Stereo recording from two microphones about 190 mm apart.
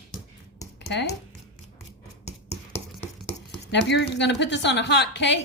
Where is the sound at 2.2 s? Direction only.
35° left (ahead or behind).